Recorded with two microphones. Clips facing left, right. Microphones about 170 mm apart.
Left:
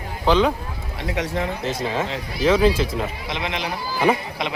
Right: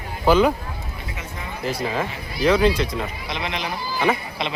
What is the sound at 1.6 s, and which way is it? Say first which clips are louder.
Speech: even; 25° left (ahead or behind).